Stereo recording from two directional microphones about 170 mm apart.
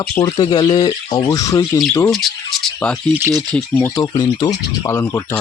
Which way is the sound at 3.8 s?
20° left (ahead or behind).